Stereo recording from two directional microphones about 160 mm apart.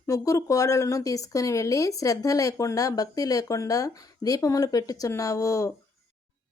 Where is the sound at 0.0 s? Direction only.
20° left (ahead or behind).